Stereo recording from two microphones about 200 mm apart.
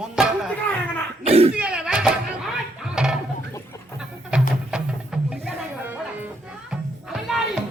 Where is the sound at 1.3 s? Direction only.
30° right (ahead or behind).